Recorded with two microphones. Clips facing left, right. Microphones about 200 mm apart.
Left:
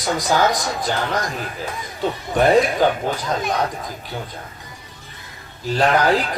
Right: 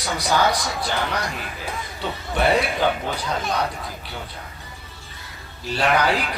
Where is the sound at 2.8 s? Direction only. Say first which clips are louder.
Left 4 dB; 45° left (ahead or behind).